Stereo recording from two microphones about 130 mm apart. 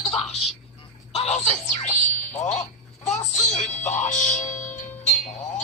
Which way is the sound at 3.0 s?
65° left (ahead or behind).